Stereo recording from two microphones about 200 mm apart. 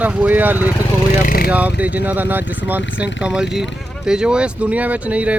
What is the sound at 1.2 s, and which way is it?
Vehicle, 45° left (ahead or behind).